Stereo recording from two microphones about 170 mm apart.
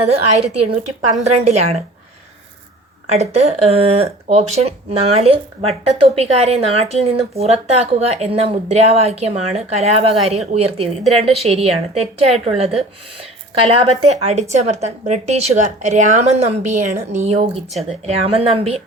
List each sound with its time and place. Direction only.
0.0 s a woman's voice: 40° right (ahead or behind)
3.1 s a woman's voice: 40° right (ahead or behind)